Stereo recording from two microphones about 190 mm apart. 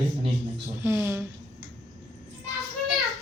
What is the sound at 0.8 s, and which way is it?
Speech, 10° right (ahead or behind).